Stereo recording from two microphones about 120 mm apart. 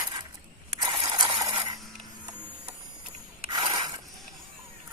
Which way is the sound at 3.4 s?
45° right (ahead or behind).